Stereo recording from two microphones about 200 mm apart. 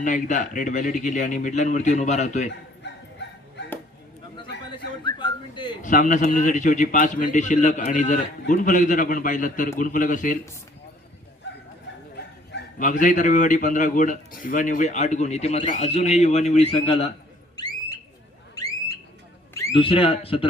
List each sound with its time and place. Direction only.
0.0 s a man's voice: 40° left (ahead or behind)
2.5 s bow-wow: 60° left (ahead or behind)
5.0 s whistling: 20° left (ahead or behind)
5.8 s a man's voice: 40° left (ahead or behind)
12.1 s bow-wow: 60° left (ahead or behind)
12.8 s a man's voice: 40° left (ahead or behind)
17.6 s a sound: 20° left (ahead or behind)
19.7 s speech: 25° left (ahead or behind)